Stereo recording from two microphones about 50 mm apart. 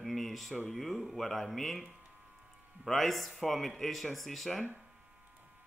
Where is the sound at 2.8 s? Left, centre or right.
Centre.